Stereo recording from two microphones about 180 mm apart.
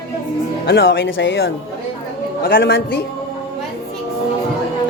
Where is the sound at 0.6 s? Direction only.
75° left (ahead or behind); by 1.5 s 90° left.